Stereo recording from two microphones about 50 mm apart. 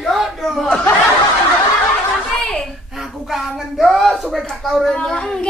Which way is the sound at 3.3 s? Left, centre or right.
Centre.